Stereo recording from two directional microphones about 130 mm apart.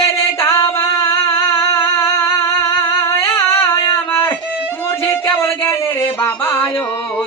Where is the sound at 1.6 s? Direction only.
20° left (ahead or behind).